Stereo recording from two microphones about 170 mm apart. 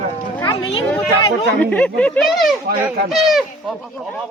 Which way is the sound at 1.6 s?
10° left (ahead or behind).